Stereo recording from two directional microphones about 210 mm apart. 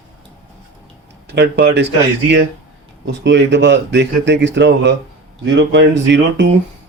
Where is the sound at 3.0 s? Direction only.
60° right (ahead or behind).